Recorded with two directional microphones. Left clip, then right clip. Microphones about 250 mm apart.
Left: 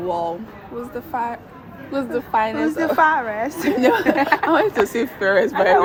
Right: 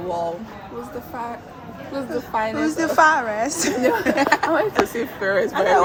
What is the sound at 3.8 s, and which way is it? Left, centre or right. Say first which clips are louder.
Speech: left 4 dB; left.